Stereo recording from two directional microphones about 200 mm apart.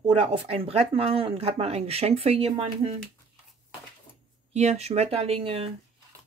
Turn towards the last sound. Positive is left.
turn(degrees=-30)  # may be behind; listen again after turning